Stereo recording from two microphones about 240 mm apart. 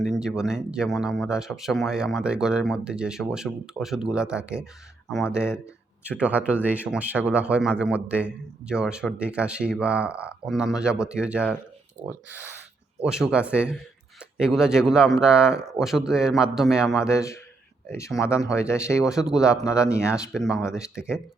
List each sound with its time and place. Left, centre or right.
0.2 s speech: centre
12.0 s speech: right
13.0 s speech: centre
17.1 s speech: centre
19.4 s speech: centre
19.9 s speech: centre
20.3 s speech: centre